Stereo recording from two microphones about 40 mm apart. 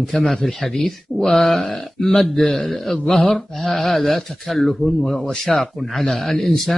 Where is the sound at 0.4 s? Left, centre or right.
Centre.